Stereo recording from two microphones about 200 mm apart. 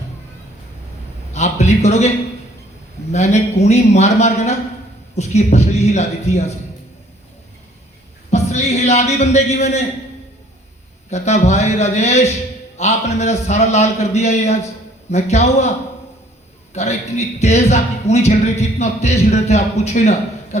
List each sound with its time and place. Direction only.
1.3 s a man's voice: 35° left (ahead or behind)
3.1 s a man's voice: 35° left (ahead or behind)
8.3 s a man's voice: 35° left (ahead or behind)
11.1 s a man's voice: 35° left (ahead or behind)
16.7 s a man's voice: 35° left (ahead or behind)